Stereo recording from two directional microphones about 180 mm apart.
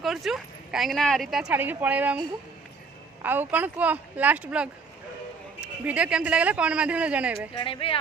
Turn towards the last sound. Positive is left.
turn(degrees=30)  # may be behind; listen again after turning